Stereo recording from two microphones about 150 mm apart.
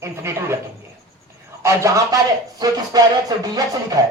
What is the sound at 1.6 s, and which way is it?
A man's voice, 20° right (ahead or behind).